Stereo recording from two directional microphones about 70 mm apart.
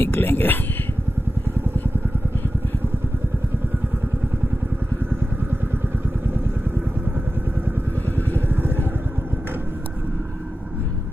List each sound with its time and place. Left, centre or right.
0.0 s speech: left